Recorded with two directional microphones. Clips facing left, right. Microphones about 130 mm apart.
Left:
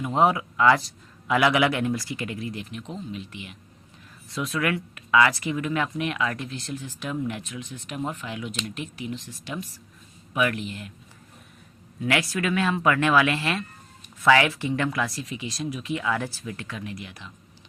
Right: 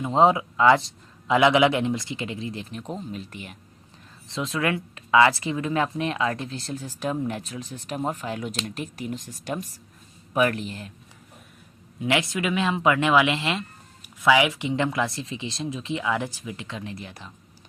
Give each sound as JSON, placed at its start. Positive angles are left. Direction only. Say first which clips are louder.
{"t": 0.0, "sound": "speech", "louder": "right 3 dB", "side_deg": -25}
{"t": 2.8, "sound": "speech", "louder": "right 2 dB", "side_deg": -40}
{"t": 4.3, "sound": "speech", "louder": "right 1 dB", "side_deg": -25}
{"t": 12.0, "sound": "speech", "louder": "right 1 dB", "side_deg": -20}